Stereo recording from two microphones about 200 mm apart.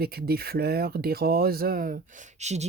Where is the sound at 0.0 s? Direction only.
50° right (ahead or behind).